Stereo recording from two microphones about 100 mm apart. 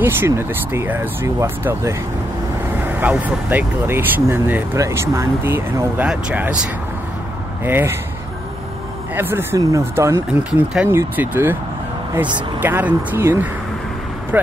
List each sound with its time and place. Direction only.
0.0 s speech: 25° right (ahead or behind)
6.0 s speech: 10° right (ahead or behind)
7.6 s speech: 25° right (ahead or behind)
9.1 s speech: 20° right (ahead or behind)